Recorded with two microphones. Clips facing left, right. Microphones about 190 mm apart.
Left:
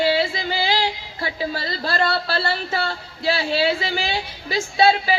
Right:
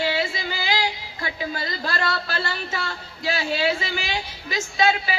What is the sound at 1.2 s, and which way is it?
Speech, 35° left (ahead or behind).